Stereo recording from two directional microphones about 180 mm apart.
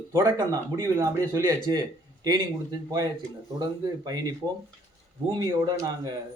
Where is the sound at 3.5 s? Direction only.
20° right (ahead or behind).